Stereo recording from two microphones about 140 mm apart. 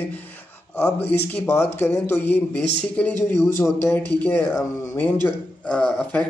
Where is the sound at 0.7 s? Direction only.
10° left (ahead or behind).